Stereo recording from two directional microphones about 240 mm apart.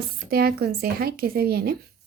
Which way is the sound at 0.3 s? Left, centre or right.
Right.